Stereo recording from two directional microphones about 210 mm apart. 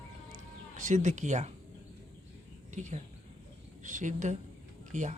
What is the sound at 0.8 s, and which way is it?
Speech, 35° right (ahead or behind).